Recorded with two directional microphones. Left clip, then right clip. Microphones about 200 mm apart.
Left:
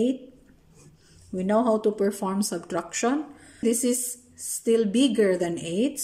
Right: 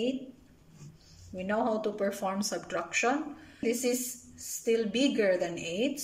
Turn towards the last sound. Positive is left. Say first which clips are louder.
# left 5 dB
turn(degrees=30)  # may be behind; listen again after turning